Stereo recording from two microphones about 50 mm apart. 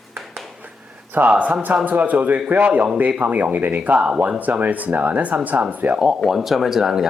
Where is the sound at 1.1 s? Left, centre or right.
Right.